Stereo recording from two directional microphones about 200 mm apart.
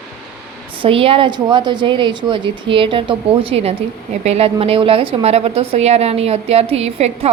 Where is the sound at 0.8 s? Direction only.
25° right (ahead or behind).